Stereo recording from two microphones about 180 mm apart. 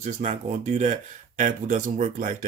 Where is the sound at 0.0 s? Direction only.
40° right (ahead or behind).